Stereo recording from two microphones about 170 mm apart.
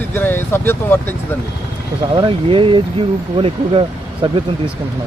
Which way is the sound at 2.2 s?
30° right (ahead or behind).